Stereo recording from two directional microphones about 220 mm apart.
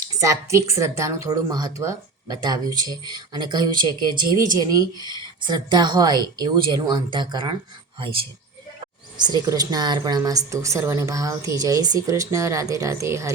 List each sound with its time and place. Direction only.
0.2 s a woman's voice: 15° right (ahead or behind)